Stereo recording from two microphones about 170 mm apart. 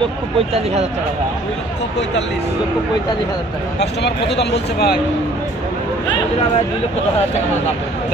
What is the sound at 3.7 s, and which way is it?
Speech, 80° left.